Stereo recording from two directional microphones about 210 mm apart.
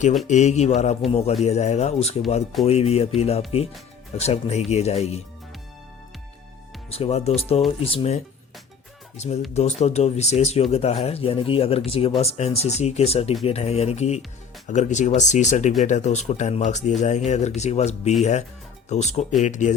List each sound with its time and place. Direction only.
0.3 s speech: 35° left (ahead or behind)
6.9 s speech: 30° left (ahead or behind)